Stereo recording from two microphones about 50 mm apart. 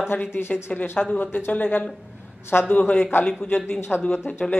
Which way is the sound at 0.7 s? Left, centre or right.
Left.